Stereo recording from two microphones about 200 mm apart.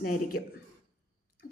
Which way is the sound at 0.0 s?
45° left (ahead or behind).